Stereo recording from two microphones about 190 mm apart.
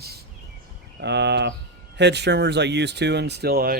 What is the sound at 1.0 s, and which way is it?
Speech, 65° right (ahead or behind).